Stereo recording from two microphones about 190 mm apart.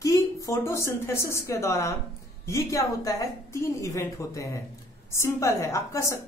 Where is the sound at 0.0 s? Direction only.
15° left (ahead or behind).